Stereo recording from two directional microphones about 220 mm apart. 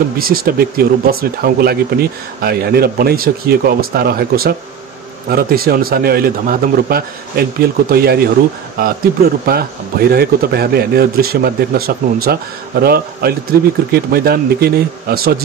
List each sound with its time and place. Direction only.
0.2 s speech: 40° right (ahead or behind)
9.5 s speech: 45° right (ahead or behind)